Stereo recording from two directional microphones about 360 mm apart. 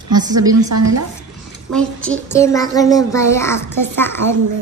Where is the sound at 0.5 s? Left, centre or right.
Right.